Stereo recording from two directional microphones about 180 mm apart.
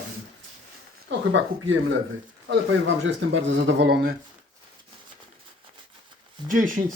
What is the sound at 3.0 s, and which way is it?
Speech, 90° right.